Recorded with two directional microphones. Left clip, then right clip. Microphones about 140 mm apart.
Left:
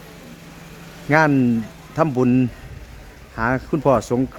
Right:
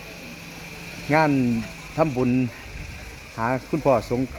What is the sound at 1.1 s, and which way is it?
Speech, 40° left (ahead or behind).